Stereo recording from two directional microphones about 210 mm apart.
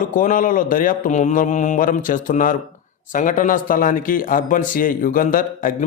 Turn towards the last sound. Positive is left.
turn(degrees=40)  # may be behind; listen again after turning